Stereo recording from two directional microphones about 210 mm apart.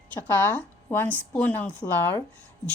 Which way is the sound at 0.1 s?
10° left (ahead or behind).